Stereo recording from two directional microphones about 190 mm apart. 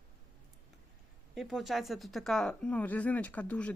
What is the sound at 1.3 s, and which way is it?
Speech, centre (ahead or behind).